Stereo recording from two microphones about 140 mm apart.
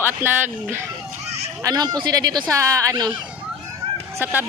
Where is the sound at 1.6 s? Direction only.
30° right (ahead or behind).